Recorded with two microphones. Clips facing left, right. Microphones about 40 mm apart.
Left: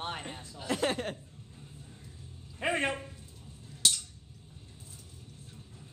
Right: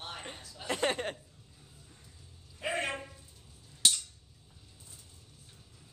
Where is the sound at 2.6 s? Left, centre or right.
Left.